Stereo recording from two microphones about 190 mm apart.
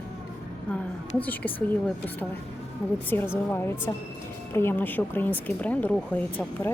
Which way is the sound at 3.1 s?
10° left (ahead or behind).